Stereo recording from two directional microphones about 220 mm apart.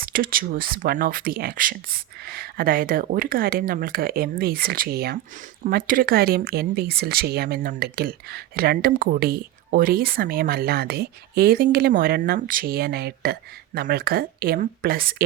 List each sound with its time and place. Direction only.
0.0 s speech: 40° right (ahead or behind)